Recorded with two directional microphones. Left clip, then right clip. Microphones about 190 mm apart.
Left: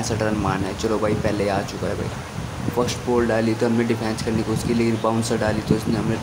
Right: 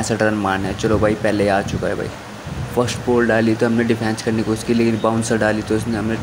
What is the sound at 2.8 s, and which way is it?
Speech, 10° right (ahead or behind).